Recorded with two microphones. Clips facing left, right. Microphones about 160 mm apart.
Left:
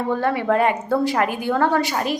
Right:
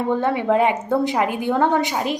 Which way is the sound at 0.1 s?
20° right (ahead or behind).